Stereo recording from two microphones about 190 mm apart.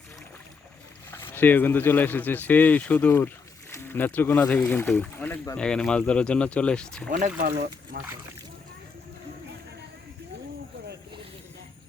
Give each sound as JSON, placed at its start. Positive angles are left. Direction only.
{"t": 1.1, "sound": "speech", "side_deg": 10}
{"t": 7.3, "sound": "speech", "side_deg": -55}